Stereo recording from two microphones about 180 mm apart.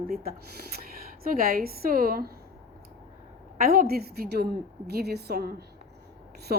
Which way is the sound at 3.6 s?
55° right (ahead or behind).